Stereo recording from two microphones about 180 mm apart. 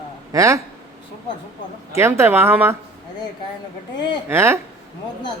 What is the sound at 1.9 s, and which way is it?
Speech, 15° right (ahead or behind).